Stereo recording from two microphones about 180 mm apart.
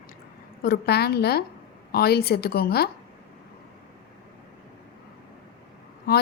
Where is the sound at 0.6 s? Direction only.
65° left (ahead or behind).